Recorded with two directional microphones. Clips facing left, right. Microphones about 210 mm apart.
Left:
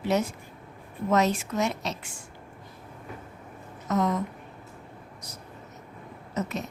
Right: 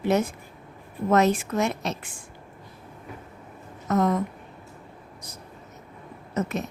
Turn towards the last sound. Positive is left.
turn(degrees=-55)  # may be behind; listen again after turning